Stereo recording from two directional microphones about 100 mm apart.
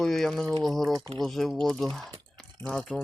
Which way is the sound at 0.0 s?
5° left (ahead or behind).